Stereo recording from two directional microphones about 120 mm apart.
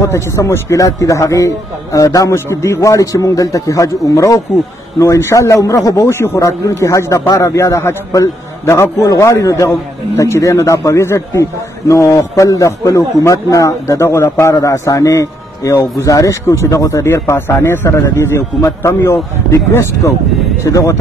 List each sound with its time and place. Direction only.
0.0 s a man's voice: 25° left (ahead or behind)